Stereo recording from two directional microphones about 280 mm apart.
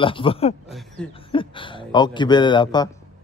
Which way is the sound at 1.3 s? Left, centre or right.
Centre.